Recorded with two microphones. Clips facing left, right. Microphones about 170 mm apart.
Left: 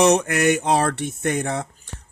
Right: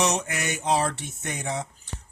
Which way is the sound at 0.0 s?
60° left (ahead or behind).